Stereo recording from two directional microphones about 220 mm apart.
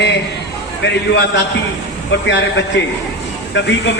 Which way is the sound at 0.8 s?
55° left (ahead or behind).